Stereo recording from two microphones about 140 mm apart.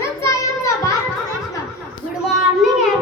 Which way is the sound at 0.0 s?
20° left (ahead or behind).